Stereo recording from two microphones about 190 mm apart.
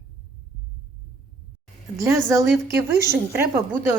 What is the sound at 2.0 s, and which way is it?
A woman's voice, 15° right (ahead or behind).